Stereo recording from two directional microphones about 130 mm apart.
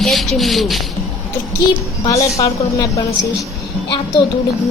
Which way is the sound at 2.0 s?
25° left (ahead or behind).